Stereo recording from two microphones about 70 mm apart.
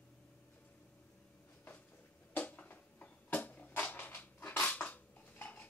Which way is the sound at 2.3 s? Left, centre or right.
Left.